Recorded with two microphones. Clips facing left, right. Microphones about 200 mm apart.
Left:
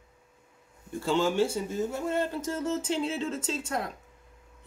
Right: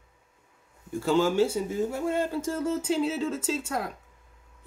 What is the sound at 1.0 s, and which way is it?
Speech, 5° right (ahead or behind).